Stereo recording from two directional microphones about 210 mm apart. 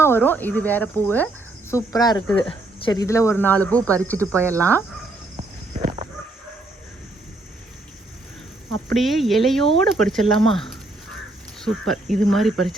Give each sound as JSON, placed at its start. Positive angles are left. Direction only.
{"t": 0.0, "sound": "speech", "side_deg": 10}
{"t": 8.9, "sound": "speech", "side_deg": 0}